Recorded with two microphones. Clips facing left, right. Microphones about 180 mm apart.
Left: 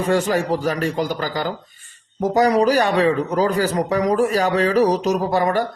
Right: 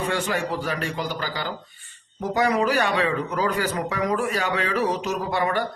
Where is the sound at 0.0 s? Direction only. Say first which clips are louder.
Left 7 dB; 40° left (ahead or behind).